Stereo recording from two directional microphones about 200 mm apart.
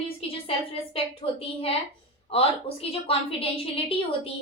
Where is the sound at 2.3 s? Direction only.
30° left (ahead or behind).